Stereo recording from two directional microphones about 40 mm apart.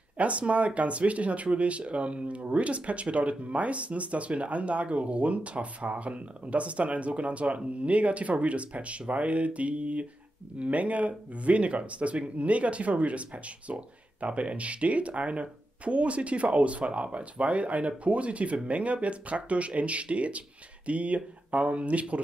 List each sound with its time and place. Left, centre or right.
0.2 s speech: right